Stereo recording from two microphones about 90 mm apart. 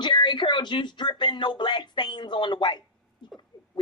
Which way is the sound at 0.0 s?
60° left (ahead or behind).